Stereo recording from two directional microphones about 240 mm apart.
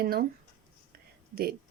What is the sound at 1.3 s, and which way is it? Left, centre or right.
Speech, right.